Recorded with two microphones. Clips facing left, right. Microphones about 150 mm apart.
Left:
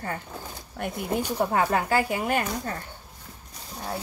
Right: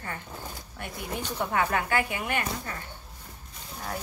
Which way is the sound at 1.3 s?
35° left (ahead or behind).